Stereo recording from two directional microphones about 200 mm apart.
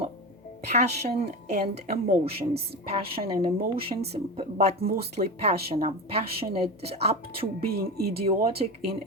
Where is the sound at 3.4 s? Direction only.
25° right (ahead or behind).